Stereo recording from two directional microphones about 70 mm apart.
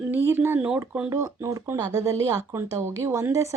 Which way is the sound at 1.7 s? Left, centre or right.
Right.